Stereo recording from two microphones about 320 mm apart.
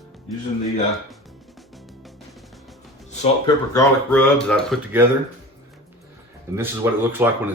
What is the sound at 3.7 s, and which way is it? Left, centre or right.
Speech, centre.